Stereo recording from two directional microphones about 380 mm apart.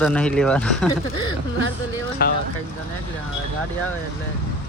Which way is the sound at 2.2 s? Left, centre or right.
Left.